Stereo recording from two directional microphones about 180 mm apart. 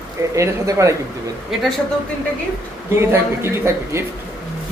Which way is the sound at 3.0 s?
15° right (ahead or behind).